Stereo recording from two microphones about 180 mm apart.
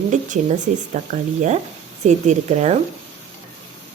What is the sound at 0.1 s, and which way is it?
Speech, 45° right (ahead or behind).